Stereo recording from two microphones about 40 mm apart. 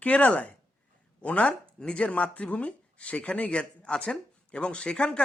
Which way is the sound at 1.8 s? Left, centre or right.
Left.